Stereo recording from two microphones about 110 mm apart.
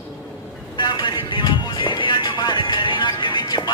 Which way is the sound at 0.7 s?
45° left (ahead or behind).